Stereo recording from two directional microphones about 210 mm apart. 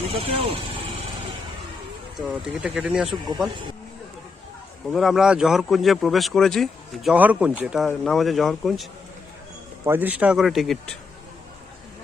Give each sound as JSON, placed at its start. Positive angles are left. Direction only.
{"t": 0.0, "sound": "speech", "side_deg": -30}
{"t": 2.1, "sound": "speech", "side_deg": -5}
{"t": 4.9, "sound": "speech", "side_deg": 0}